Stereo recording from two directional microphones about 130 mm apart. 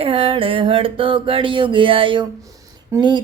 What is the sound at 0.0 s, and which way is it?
Music, 45° right (ahead or behind).